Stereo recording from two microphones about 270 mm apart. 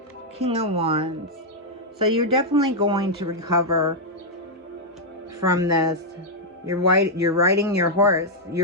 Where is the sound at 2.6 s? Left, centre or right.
Centre.